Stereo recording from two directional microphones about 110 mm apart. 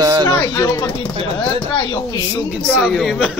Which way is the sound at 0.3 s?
25° left (ahead or behind).